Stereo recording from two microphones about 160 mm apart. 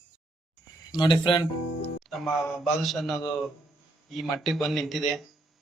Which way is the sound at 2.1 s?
Centre (ahead or behind).